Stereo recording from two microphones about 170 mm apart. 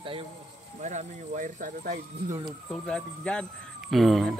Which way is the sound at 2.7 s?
5° left (ahead or behind).